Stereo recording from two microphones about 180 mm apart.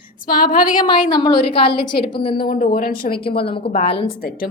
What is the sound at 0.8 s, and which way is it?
A woman's voice, 25° left (ahead or behind).